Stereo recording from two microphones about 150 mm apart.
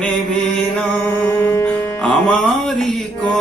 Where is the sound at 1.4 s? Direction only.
15° left (ahead or behind).